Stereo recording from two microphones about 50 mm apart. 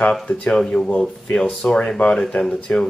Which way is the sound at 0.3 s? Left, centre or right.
Left.